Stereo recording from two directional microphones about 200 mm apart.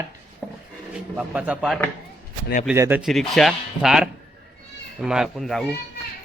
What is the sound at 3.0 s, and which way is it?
Speech, centre (ahead or behind).